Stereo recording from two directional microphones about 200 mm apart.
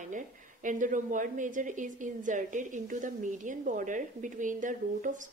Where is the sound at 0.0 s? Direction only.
40° right (ahead or behind).